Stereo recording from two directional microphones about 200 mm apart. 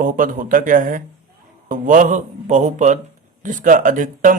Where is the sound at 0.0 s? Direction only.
45° right (ahead or behind).